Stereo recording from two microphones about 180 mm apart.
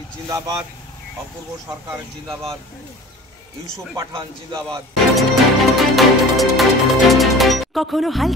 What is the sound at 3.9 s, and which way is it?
Speech, 25° right (ahead or behind).